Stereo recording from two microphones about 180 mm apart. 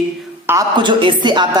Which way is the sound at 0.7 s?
25° right (ahead or behind).